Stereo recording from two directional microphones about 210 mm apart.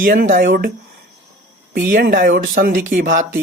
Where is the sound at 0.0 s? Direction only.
45° right (ahead or behind).